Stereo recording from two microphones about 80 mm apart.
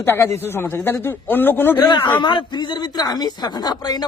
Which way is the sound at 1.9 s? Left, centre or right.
Left.